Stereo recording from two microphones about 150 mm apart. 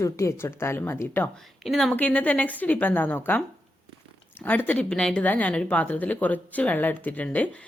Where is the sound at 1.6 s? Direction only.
Centre (ahead or behind).